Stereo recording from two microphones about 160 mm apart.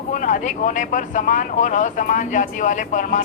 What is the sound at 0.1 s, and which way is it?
Speech, 55° left (ahead or behind).